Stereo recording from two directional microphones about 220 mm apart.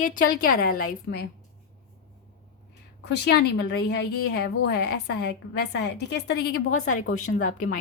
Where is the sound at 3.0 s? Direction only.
50° left (ahead or behind).